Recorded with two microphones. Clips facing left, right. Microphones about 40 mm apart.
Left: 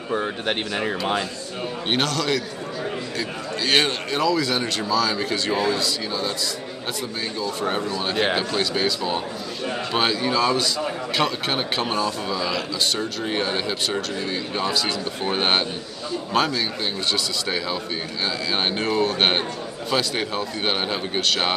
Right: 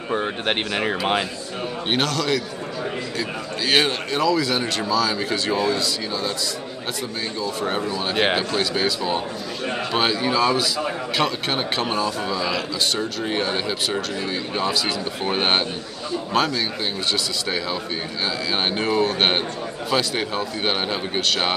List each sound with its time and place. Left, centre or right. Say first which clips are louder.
0.1 s speech: right 1 dB; right
1.9 s a man's voice: right 1 dB; centre
7.4 s a man's voice: even; centre